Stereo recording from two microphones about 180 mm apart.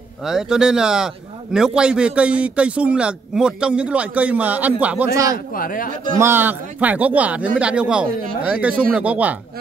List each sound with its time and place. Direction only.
0.2 s a man's voice: 5° right (ahead or behind)
5.5 s speech: 50° left (ahead or behind)
6.1 s a man's voice: 15° right (ahead or behind)